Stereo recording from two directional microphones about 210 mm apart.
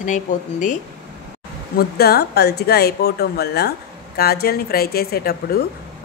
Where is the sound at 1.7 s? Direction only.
50° left (ahead or behind).